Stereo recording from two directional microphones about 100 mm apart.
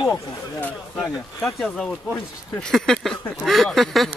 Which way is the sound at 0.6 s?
15° left (ahead or behind).